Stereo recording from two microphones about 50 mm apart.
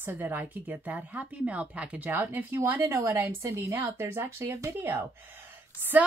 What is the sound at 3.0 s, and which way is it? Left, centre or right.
Speech, right.